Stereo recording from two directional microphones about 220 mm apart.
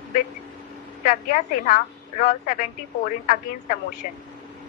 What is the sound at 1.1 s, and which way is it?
A woman's voice, 35° left (ahead or behind).